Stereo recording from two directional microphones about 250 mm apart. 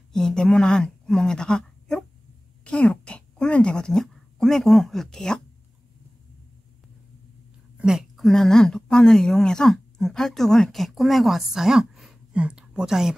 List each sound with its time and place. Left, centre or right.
0.1 s speech: centre
2.6 s a sound: centre
7.7 s a woman's voice: centre